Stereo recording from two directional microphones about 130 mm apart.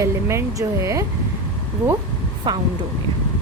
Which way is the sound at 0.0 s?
20° right (ahead or behind).